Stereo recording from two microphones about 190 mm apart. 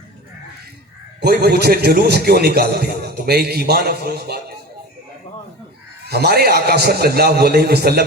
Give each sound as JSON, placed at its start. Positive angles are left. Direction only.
{"t": 1.2, "sound": "a man's voice", "side_deg": -55}
{"t": 6.1, "sound": "a man's voice", "side_deg": -55}